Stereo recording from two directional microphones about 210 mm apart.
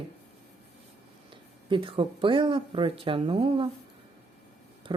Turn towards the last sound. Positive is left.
turn(degrees=-25)  # may be behind; listen again after turning